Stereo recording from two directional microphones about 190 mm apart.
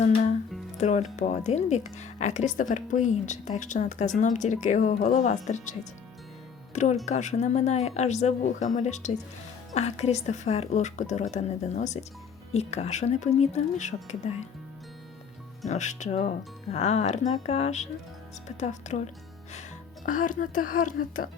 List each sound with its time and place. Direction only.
0.0 s speech: 40° left (ahead or behind)
7.0 s speech: 40° left (ahead or behind)
15.6 s a woman's voice: 40° left (ahead or behind)